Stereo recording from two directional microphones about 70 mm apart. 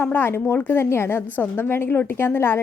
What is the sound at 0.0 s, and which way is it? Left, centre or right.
Speech, left.